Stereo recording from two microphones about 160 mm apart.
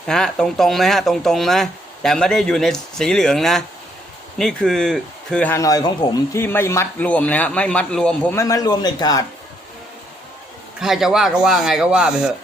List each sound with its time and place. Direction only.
0.1 s a man's voice: 5° left (ahead or behind); by 6.4 s 25° left (ahead or behind)
6.4 s a man's voice: 15° left (ahead or behind)
8.4 s a man's voice: 20° left (ahead or behind)
10.8 s speech: centre (ahead or behind)